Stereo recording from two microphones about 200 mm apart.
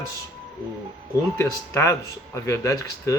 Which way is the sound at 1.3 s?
15° left (ahead or behind).